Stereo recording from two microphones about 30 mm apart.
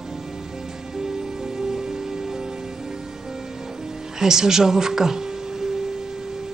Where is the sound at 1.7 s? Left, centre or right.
Centre.